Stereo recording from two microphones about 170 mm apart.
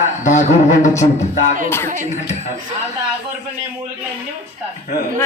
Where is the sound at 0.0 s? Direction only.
45° left (ahead or behind).